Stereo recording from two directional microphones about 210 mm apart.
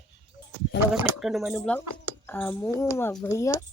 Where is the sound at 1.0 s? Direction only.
Centre (ahead or behind).